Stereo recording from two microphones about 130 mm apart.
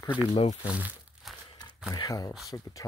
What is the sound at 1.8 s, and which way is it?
Speech, 25° left (ahead or behind).